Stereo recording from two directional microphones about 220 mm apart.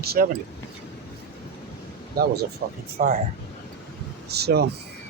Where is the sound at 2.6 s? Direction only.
45° right (ahead or behind).